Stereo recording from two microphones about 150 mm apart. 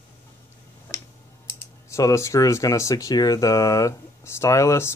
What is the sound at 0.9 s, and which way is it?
Tick-tock, 20° left (ahead or behind).